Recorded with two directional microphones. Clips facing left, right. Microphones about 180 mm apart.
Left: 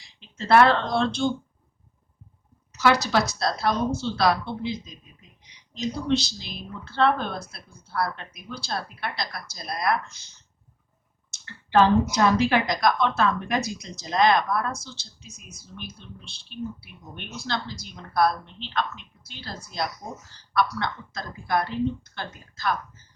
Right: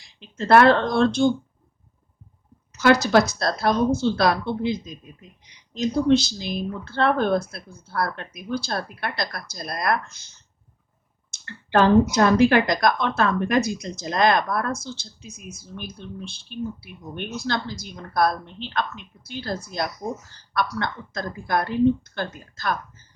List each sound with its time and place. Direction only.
0.2 s speech: 50° right (ahead or behind)
2.7 s speech: 50° right (ahead or behind)
11.3 s speech: 50° right (ahead or behind)
20.6 s speech: 50° right (ahead or behind)